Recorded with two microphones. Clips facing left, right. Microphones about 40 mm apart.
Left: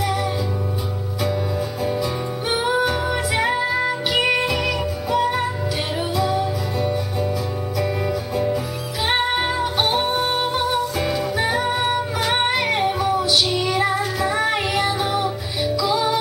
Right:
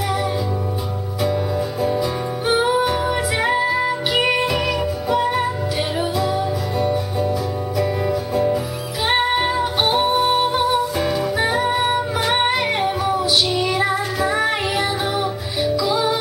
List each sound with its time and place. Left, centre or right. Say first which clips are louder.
1.2 s music: right 3 dB; centre